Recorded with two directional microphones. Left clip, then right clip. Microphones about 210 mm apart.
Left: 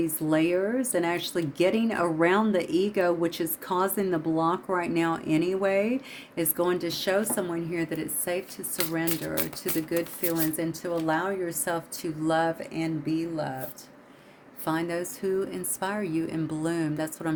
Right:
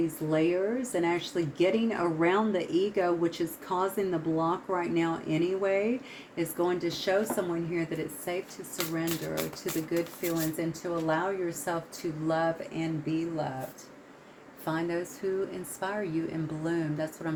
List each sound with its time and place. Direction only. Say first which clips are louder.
0.3 s speech: left 3 dB; 45° left (ahead or behind)
14.6 s a woman's voice: left 3 dB; 35° left (ahead or behind)